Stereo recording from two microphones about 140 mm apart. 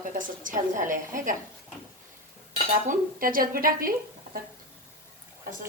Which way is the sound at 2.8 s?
85° right.